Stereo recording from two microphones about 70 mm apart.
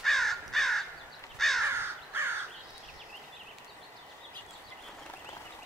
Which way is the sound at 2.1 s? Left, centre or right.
Right.